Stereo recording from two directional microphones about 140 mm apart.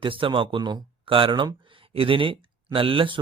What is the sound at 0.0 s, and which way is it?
Speech, 40° right (ahead or behind).